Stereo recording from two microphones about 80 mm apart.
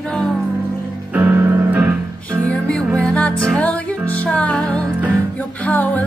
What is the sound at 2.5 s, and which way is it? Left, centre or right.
Music, centre.